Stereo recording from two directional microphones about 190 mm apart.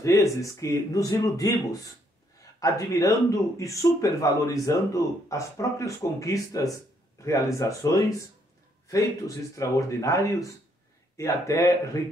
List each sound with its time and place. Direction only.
0.0 s speech: 15° left (ahead or behind)